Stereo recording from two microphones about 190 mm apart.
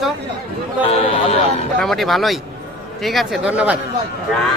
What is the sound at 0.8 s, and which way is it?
Speech, 30° left (ahead or behind).